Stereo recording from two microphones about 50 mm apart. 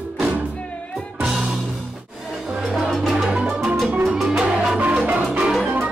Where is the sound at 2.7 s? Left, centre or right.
Centre.